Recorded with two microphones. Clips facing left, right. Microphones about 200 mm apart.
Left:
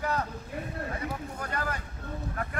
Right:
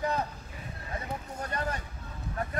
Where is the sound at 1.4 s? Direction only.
25° right (ahead or behind).